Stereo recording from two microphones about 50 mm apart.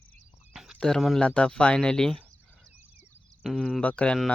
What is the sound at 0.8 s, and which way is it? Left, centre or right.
Speech, centre.